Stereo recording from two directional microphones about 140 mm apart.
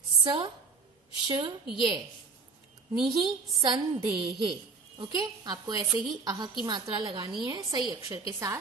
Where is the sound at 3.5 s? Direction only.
25° right (ahead or behind).